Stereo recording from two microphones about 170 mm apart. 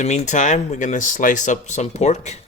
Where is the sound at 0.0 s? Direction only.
45° left (ahead or behind).